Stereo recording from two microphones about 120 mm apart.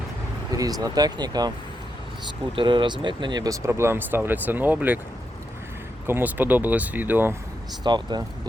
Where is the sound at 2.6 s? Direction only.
40° right (ahead or behind); by 5.0 s 15° right (ahead or behind).